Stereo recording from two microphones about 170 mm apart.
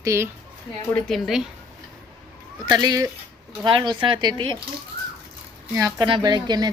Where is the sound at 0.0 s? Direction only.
15° right (ahead or behind).